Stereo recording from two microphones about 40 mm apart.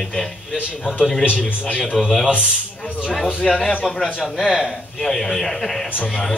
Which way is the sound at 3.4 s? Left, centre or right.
Centre.